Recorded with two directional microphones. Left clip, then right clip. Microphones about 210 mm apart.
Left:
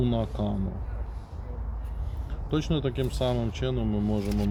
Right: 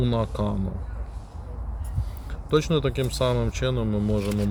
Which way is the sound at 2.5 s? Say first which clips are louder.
Right 6 dB; 45° right (ahead or behind).